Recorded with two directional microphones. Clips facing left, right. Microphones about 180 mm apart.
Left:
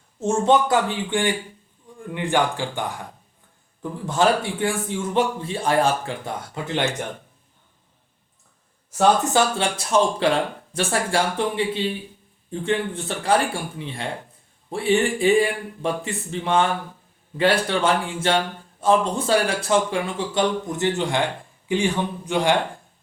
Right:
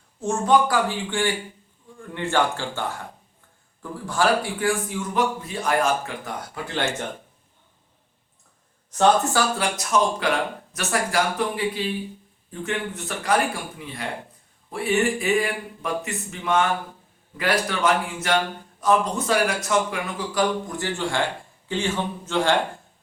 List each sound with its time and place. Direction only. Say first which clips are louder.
0.2 s a man's voice: left 1 dB; 25° left (ahead or behind)
4.0 s a man's voice: left 2 dB; 20° left (ahead or behind)
9.3 s a man's voice: left 3 dB; 30° left (ahead or behind)